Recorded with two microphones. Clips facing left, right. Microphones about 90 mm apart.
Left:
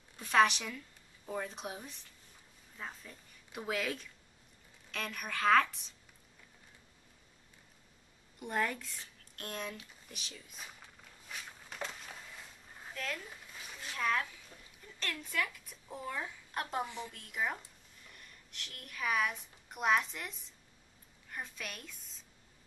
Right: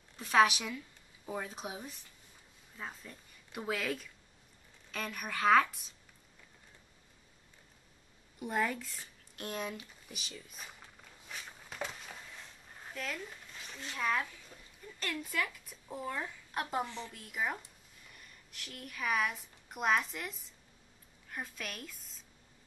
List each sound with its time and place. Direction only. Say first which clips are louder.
0.2 s a woman's voice: right 1 dB; 5° right (ahead or behind)
8.4 s a sound: right 1 dB; centre (ahead or behind)
16.8 s a woman's voice: even; 15° left (ahead or behind)
17.1 s a woman's voice: even; 5° right (ahead or behind)